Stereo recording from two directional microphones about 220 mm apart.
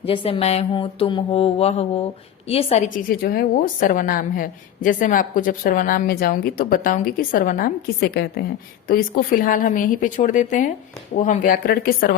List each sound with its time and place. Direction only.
0.0 s mantra: 25° left (ahead or behind)
3.1 s a woman's voice: 45° left (ahead or behind)